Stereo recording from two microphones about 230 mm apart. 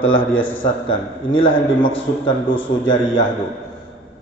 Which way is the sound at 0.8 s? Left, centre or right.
Left.